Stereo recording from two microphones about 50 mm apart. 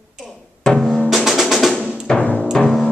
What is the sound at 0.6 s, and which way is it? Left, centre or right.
Music, centre.